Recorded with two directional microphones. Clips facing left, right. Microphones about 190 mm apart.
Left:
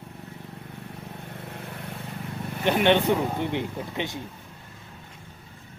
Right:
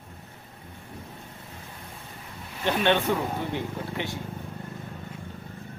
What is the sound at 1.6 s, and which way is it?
Vehicle, 70° left (ahead or behind).